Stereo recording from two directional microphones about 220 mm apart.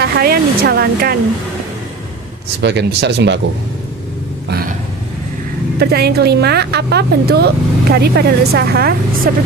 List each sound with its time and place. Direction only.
0.0 s a woman's voice: 45° right (ahead or behind)
2.6 s a woman's voice: 50° right (ahead or behind)
4.4 s vehicle: 45° right (ahead or behind)
5.8 s a woman's voice: 45° right (ahead or behind)